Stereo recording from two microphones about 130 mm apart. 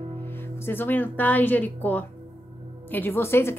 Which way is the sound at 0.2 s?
15° left (ahead or behind).